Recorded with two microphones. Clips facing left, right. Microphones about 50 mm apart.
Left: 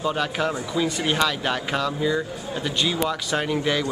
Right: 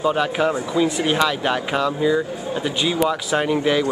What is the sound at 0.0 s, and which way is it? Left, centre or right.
Speech, centre.